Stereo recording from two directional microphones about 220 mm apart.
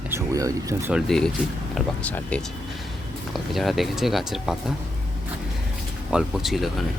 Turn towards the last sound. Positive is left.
turn(degrees=0)  # may be behind; listen again after turning